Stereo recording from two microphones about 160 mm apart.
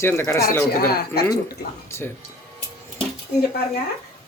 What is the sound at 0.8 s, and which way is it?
Speech, 80° left.